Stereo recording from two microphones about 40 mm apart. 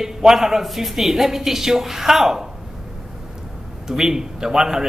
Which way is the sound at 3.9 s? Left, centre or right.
Centre.